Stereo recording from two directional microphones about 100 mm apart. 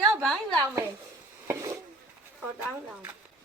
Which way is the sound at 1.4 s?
30° right (ahead or behind).